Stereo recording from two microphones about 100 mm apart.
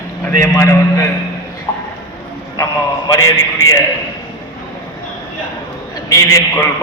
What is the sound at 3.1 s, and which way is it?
Speech, 35° left (ahead or behind).